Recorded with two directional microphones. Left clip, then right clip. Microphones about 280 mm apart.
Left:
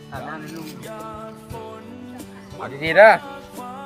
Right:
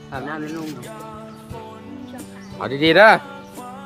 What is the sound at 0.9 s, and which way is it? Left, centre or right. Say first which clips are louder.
Music: left 2 dB; centre.